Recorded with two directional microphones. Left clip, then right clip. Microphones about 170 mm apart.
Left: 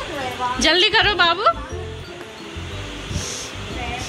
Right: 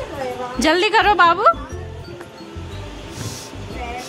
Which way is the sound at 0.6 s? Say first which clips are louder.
Right 1 dB; 50° right (ahead or behind).